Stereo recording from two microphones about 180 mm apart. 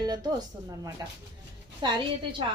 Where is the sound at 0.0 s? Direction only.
20° right (ahead or behind).